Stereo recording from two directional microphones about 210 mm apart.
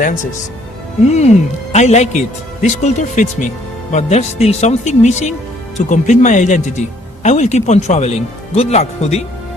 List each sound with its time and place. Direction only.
1.0 s speech: 30° left (ahead or behind)